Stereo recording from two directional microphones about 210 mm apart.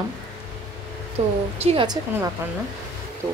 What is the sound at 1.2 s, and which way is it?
Speech, 30° right (ahead or behind).